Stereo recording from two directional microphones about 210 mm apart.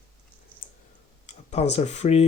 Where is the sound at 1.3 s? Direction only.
35° left (ahead or behind).